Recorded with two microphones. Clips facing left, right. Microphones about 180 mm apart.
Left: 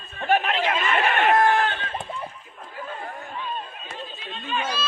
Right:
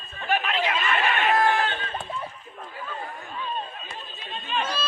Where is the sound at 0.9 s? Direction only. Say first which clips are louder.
Left 4 dB; 45° left (ahead or behind).